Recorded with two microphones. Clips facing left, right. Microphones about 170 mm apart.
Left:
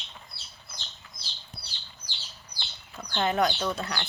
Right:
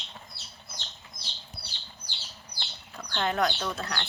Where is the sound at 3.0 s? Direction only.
Centre (ahead or behind).